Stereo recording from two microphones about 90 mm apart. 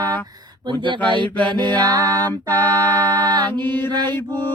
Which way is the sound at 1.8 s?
45° right (ahead or behind).